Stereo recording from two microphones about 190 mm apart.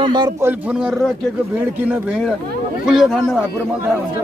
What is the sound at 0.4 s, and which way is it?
Speech, 10° right (ahead or behind).